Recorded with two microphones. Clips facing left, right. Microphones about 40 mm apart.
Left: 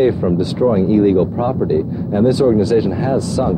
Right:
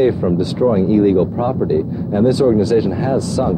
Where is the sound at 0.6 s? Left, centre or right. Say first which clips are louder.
Even; centre.